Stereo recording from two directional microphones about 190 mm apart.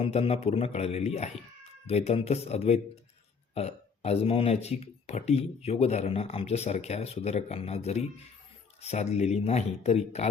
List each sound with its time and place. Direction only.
0.0 s speech: 30° left (ahead or behind)